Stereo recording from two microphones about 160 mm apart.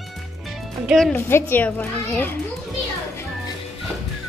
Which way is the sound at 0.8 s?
5° left (ahead or behind).